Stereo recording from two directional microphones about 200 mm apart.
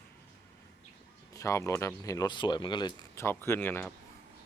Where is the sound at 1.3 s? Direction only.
15° left (ahead or behind).